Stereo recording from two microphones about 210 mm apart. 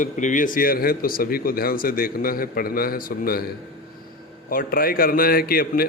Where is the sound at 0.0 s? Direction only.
35° left (ahead or behind).